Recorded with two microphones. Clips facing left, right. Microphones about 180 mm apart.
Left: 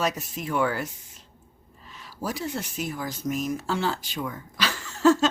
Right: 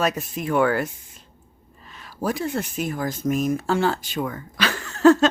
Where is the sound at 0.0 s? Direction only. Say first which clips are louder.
Right 4 dB; 55° right (ahead or behind).